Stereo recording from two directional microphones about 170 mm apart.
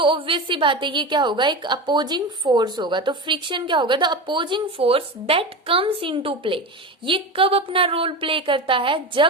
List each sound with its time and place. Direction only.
0.0 s a woman's voice: 30° right (ahead or behind)